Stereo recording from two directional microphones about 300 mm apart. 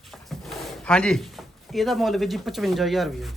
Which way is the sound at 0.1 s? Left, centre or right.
Centre.